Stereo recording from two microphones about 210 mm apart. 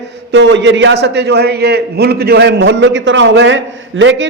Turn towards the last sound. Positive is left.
turn(degrees=-60)  # may be behind; listen again after turning